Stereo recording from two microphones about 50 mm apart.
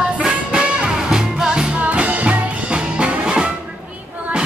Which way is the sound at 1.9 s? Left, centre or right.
Right.